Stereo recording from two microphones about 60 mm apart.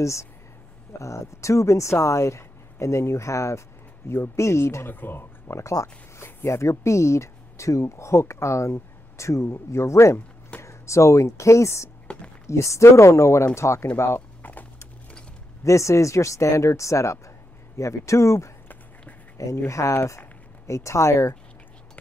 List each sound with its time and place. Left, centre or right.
0.0 s speech: left
5.0 s speech: left
5.6 s speech: left
14.4 s a sound: left
15.6 s speech: left
19.9 s speech: left